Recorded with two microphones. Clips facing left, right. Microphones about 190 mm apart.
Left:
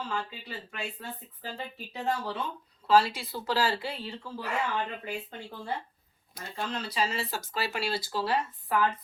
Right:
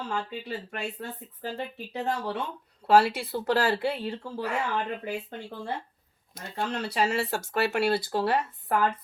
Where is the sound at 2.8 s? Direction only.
65° right (ahead or behind).